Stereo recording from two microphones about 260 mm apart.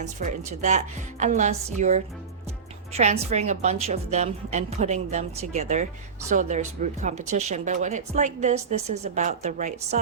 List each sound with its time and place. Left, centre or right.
0.0 s a woman's voice: right
3.0 s a woman's voice: right